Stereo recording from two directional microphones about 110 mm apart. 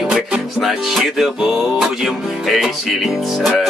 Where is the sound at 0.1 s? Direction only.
Centre (ahead or behind).